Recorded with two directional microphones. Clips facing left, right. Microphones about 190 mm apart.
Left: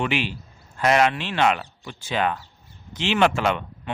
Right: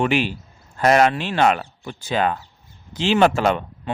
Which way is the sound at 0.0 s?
45° right (ahead or behind).